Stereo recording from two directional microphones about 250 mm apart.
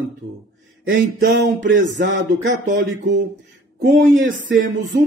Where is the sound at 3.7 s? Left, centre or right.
Right.